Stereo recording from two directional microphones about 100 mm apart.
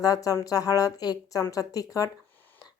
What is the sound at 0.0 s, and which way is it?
A woman's voice, 35° left (ahead or behind).